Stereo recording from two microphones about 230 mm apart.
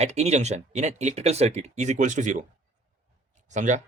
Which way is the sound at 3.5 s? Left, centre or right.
Right.